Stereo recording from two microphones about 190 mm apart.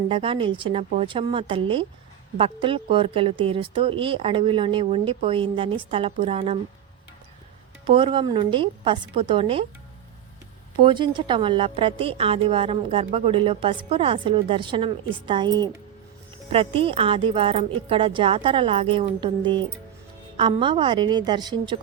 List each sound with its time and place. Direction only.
0.1 s speech: 30° right (ahead or behind)
7.9 s speech: 30° right (ahead or behind)
10.8 s speech: 25° right (ahead or behind)